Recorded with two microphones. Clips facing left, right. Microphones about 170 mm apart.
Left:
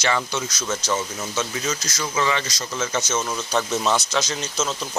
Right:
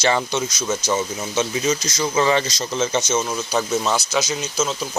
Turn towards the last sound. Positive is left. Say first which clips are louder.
# right 3 dB
turn(degrees=-10)  # may be behind; listen again after turning